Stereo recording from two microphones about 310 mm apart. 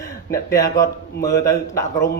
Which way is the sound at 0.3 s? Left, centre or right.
Centre.